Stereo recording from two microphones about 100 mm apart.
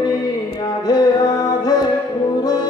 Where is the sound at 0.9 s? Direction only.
40° left (ahead or behind).